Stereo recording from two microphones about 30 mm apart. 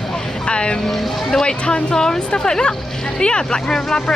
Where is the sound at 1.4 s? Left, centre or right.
Left.